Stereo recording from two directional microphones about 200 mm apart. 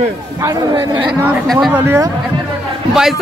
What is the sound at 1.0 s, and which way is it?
Speech, 10° right (ahead or behind).